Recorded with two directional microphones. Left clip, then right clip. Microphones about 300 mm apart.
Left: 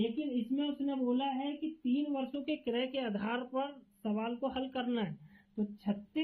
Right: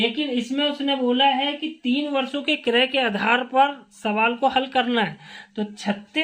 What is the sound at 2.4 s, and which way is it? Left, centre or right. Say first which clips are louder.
Speech: right 18 dB; right.